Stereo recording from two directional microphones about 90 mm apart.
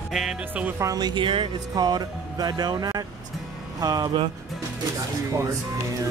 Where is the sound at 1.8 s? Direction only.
50° right (ahead or behind).